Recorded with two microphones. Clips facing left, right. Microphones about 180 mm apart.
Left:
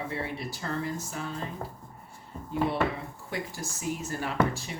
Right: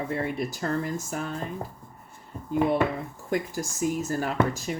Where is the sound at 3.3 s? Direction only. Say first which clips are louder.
Right 8 dB; 45° right (ahead or behind).